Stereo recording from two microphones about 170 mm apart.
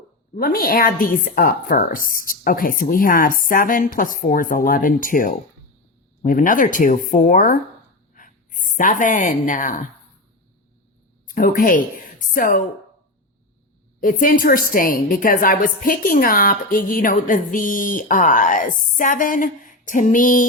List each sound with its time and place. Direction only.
0.3 s a woman's voice: 60° left (ahead or behind)
11.3 s a woman's voice: 55° left (ahead or behind)
14.0 s a woman's voice: 55° left (ahead or behind)